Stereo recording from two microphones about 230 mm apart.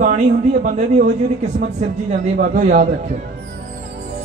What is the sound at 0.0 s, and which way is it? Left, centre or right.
A man's voice, right.